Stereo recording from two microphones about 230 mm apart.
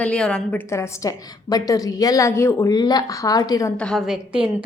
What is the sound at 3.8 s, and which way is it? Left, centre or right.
Speech, centre.